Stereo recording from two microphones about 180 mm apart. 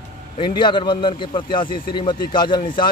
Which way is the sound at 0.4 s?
25° left (ahead or behind).